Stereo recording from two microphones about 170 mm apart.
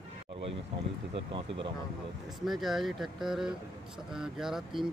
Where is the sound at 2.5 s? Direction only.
Centre (ahead or behind).